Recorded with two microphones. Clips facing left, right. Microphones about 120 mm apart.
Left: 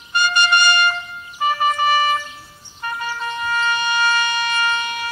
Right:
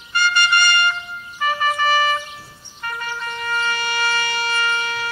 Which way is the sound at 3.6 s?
20° left (ahead or behind).